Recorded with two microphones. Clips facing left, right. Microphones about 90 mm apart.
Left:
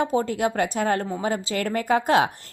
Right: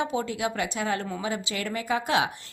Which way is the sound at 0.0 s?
40° left (ahead or behind).